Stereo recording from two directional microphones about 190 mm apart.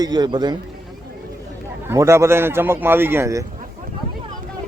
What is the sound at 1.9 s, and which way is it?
A man's voice, 15° right (ahead or behind).